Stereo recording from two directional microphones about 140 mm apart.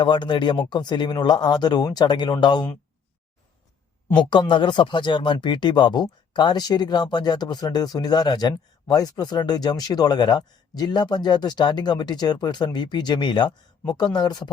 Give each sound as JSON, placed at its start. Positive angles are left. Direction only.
{"t": 0.0, "sound": "speech", "side_deg": 35}
{"t": 4.1, "sound": "speech", "side_deg": 35}